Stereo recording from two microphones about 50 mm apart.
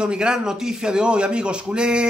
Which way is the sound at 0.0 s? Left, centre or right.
Centre.